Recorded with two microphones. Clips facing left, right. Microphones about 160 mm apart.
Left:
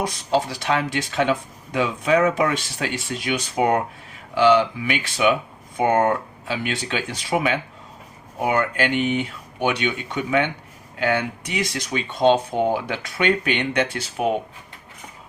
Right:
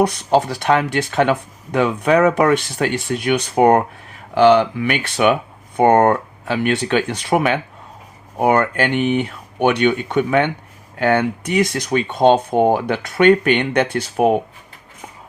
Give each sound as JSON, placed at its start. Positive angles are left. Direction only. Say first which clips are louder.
{"t": 0.0, "sound": "speech", "louder": "right 6 dB", "side_deg": -60}